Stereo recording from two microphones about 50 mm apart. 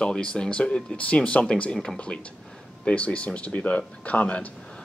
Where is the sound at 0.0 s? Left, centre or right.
Centre.